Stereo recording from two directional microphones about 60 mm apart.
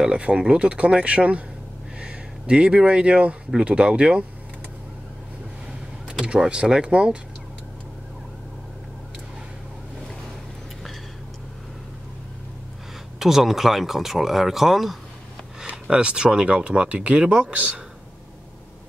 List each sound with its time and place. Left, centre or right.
0.0 s speech: centre
6.0 s speech: centre
13.2 s speech: centre
15.6 s speech: centre